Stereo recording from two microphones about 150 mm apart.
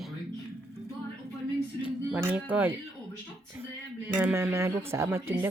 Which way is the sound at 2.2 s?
10° right (ahead or behind).